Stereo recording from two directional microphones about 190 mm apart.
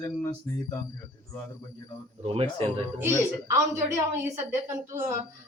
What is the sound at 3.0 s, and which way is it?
A woman's voice, 15° right (ahead or behind).